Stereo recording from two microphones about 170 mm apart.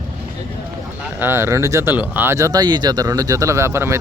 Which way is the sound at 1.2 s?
15° right (ahead or behind).